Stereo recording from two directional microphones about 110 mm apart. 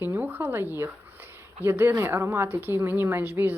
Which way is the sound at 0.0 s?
15° right (ahead or behind).